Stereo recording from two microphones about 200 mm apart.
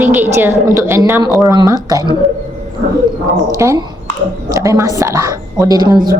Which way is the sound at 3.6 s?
15° right (ahead or behind).